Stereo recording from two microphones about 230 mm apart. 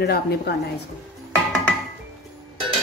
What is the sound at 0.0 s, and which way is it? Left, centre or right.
Speech, left.